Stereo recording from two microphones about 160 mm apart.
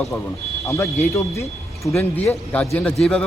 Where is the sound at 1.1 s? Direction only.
20° left (ahead or behind).